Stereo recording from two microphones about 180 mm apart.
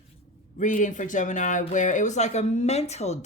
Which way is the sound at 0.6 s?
45° left (ahead or behind).